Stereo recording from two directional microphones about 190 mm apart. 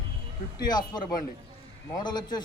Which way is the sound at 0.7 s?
20° left (ahead or behind).